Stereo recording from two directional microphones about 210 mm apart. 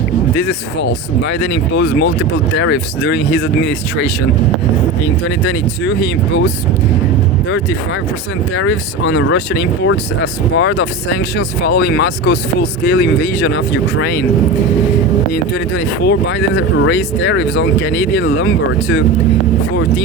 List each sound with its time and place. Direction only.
0.4 s speech: 60° left (ahead or behind)
5.5 s speech: 60° left (ahead or behind)
8.5 s speech: 65° left (ahead or behind)
15.5 s speech: 55° left (ahead or behind)